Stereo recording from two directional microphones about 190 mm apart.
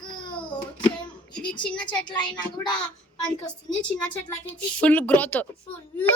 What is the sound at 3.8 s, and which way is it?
A child's voice, 5° left (ahead or behind).